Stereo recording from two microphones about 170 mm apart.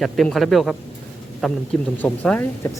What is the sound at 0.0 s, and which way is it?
Speech, centre (ahead or behind).